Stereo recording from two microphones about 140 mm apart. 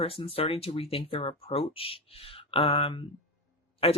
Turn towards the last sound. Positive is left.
turn(degrees=45)  # may be behind; listen again after turning